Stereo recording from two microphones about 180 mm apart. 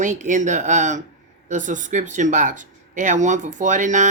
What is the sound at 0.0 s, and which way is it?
Speech, 45° right (ahead or behind).